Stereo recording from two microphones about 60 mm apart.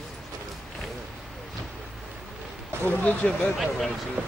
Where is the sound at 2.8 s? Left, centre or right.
Left.